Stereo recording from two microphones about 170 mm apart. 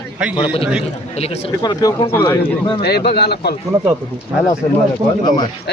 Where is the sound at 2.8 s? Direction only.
70° left (ahead or behind).